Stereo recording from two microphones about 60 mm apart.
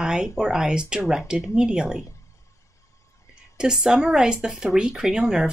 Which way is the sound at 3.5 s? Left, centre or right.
Centre.